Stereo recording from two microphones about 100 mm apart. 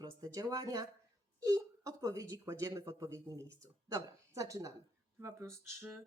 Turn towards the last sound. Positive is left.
turn(degrees=-30)  # may be behind; listen again after turning